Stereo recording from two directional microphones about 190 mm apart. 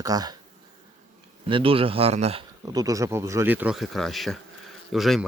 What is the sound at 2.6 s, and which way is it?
Speech, 20° right (ahead or behind).